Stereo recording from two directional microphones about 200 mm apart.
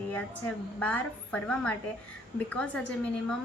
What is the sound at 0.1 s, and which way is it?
A woman's voice, 10° left (ahead or behind).